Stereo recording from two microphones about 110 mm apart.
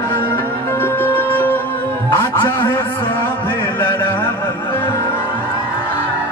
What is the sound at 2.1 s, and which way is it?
Music, 45° left (ahead or behind).